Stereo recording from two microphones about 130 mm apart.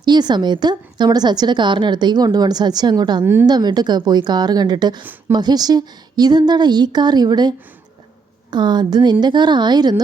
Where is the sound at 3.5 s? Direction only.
30° right (ahead or behind).